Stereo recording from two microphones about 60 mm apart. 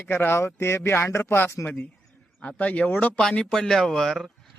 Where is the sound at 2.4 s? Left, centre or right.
Left.